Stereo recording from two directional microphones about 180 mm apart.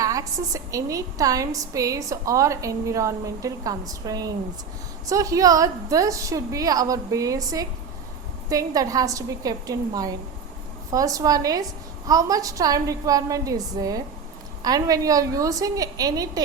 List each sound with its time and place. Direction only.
0.0 s a woman's voice: 20° right (ahead or behind)